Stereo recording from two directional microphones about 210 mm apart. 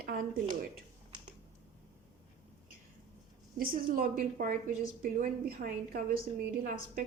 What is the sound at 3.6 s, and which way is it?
A woman's voice, 45° right (ahead or behind).